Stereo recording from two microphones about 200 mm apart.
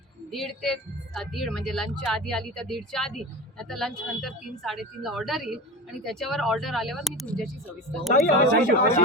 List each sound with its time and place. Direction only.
0.3 s a woman's voice: centre (ahead or behind)
8.4 s speech: 40° left (ahead or behind)